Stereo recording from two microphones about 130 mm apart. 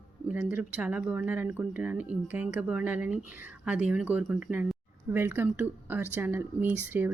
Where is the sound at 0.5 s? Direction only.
10° right (ahead or behind).